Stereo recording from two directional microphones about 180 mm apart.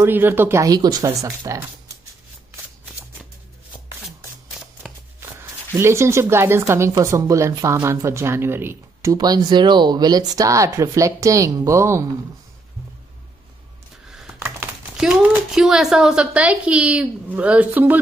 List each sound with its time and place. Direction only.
0.0 s speech: 10° right (ahead or behind)
4.8 s shuffling cards: centre (ahead or behind)
5.2 s speech: 15° right (ahead or behind)
14.0 s computer keyboard: 5° right (ahead or behind)
15.0 s speech: centre (ahead or behind)